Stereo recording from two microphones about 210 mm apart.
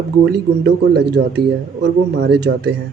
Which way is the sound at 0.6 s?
50° right (ahead or behind).